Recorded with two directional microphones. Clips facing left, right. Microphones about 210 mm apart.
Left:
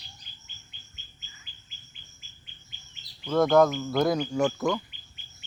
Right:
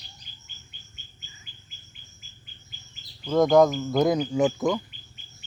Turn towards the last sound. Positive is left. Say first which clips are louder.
# right 3 dB
turn(degrees=-20)  # may be behind; listen again after turning